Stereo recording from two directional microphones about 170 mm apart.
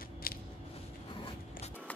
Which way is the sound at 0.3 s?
60° left (ahead or behind).